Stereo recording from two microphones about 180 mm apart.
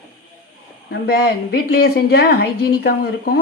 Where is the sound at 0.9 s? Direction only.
60° left (ahead or behind).